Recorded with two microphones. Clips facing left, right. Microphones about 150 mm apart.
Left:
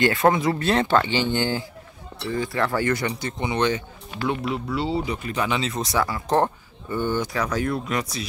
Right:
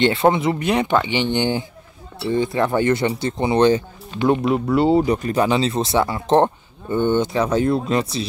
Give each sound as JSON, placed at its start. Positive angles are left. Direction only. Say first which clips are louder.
{"t": 0.0, "sound": "speech", "louder": "right 3 dB", "side_deg": -25}
{"t": 4.3, "sound": "speech", "louder": "right 9 dB", "side_deg": -45}